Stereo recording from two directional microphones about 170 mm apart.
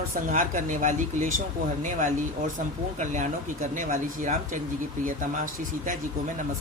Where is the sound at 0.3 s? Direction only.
50° right (ahead or behind).